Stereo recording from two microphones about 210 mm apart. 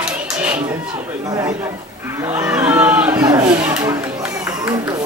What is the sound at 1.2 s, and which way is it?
Chatter, 15° right (ahead or behind).